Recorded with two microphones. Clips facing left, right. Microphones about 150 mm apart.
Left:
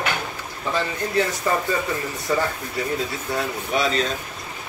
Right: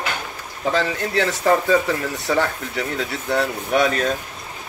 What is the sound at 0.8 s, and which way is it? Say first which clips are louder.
Speech: right 1 dB; 90° right.